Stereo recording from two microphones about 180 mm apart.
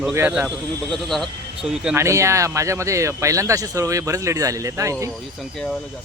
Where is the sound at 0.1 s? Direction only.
10° right (ahead or behind).